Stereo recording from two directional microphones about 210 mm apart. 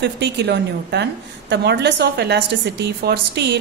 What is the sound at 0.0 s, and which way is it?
A woman's voice, 55° right (ahead or behind).